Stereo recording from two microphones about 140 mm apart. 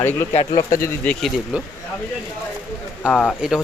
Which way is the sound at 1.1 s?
10° left (ahead or behind).